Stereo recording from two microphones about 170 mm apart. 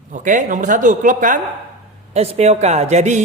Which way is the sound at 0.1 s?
50° right (ahead or behind).